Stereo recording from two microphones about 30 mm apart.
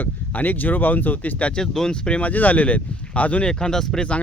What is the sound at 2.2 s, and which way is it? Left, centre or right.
Speech, left.